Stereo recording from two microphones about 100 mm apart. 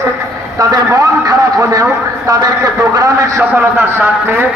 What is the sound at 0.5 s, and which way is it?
Speech, 35° right (ahead or behind).